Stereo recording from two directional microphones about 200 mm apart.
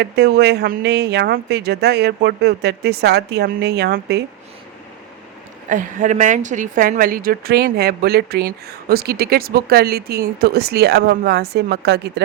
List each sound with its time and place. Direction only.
0.0 s speech: 55° right (ahead or behind)
5.6 s a woman's voice: 40° right (ahead or behind); by 12.2 s 55° right (ahead or behind)